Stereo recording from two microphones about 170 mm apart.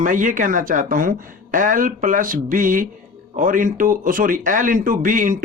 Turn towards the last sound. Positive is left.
turn(degrees=-55)  # may be behind; listen again after turning